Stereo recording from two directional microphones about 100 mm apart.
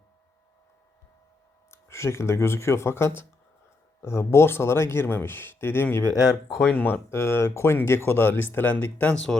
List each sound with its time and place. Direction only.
1.7 s speech: 25° left (ahead or behind)
6.5 s speech: 5° right (ahead or behind)
6.7 s speech: 20° left (ahead or behind)